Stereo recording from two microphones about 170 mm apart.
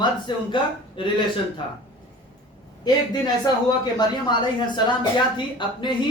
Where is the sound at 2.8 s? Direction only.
25° left (ahead or behind).